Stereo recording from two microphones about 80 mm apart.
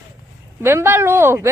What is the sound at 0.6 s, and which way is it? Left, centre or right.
Speech, right.